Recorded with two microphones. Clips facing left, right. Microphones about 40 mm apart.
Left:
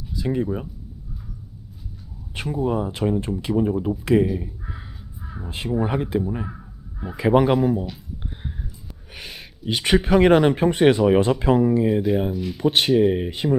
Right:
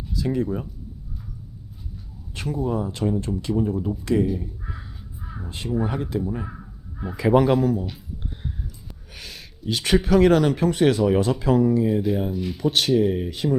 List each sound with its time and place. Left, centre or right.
0.2 s a man's voice: centre
2.3 s speech: centre
5.2 s crow: centre
5.6 s a man's voice: centre
9.1 s a man's voice: left
12.3 s speech: centre
12.5 s speech: left